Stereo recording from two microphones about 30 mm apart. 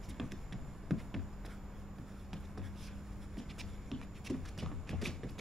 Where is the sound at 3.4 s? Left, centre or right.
Centre.